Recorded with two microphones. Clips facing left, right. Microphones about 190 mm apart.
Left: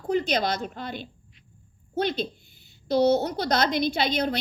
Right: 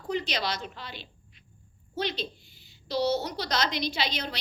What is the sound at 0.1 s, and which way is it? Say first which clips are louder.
A woman's voice: left 6 dB; 50° left (ahead or behind).